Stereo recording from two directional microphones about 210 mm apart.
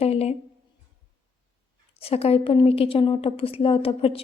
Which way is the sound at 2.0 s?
30° left (ahead or behind).